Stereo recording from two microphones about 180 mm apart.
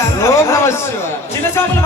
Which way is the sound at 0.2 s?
15° left (ahead or behind).